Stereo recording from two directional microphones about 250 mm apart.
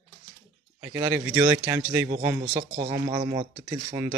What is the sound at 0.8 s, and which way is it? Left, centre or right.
Speech, centre.